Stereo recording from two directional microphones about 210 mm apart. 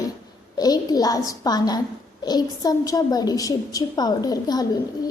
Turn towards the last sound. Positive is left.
turn(degrees=20)  # may be behind; listen again after turning